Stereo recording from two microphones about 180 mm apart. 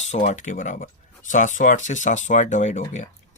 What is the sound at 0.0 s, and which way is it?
Speech, 40° left (ahead or behind).